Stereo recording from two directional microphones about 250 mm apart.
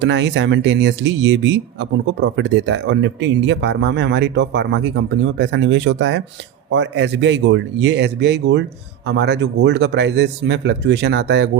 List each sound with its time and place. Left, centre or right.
0.0 s speech: right